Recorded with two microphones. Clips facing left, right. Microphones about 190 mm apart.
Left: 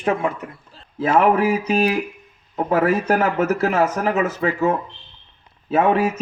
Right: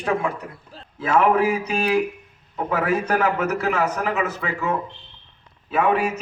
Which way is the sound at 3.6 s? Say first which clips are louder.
Left 4 dB; 35° left (ahead or behind).